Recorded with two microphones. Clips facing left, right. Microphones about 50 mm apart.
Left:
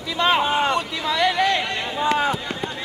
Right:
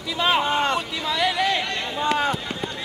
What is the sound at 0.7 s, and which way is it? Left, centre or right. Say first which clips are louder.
Speech: left 2 dB; centre.